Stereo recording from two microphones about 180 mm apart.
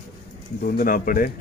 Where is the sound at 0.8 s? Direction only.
50° left (ahead or behind).